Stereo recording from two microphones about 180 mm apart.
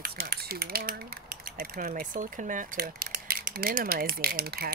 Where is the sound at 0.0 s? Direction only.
55° right (ahead or behind).